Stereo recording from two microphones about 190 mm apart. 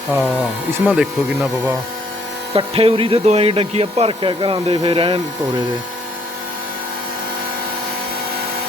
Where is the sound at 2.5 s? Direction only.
30° right (ahead or behind).